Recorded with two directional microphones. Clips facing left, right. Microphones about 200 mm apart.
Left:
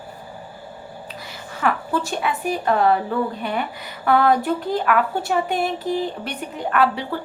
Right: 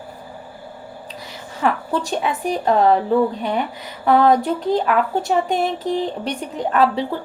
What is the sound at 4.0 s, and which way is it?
A woman's voice, 20° right (ahead or behind).